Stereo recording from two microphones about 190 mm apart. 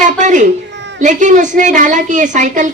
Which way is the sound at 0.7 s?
65° right (ahead or behind).